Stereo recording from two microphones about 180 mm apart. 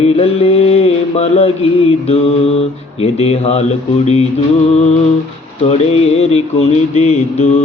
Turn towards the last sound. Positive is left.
turn(degrees=40)  # may be behind; listen again after turning